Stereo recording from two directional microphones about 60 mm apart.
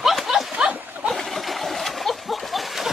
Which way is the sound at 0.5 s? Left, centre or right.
Centre.